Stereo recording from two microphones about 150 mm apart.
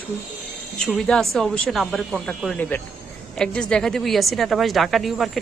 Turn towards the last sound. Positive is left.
turn(degrees=0)  # may be behind; listen again after turning